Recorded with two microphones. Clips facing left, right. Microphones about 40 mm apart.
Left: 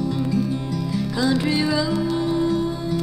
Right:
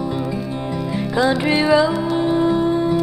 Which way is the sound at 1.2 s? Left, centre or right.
Right.